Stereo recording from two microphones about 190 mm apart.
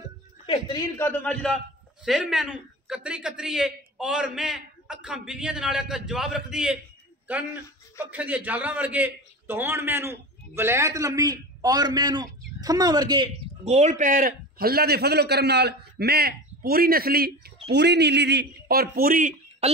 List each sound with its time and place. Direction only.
0.5 s a man's voice: 20° left (ahead or behind); by 6.8 s 5° right (ahead or behind)
8.0 s a man's voice: 5° right (ahead or behind)
13.7 s a man's voice: 35° right (ahead or behind); by 17.5 s 50° right (ahead or behind)
17.6 s a man's voice: 65° right (ahead or behind); by 19.7 s 45° right (ahead or behind)